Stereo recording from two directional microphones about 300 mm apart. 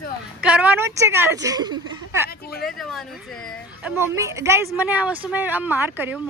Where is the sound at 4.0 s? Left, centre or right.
Centre.